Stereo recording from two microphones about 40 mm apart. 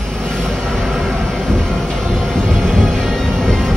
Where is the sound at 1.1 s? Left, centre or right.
Centre.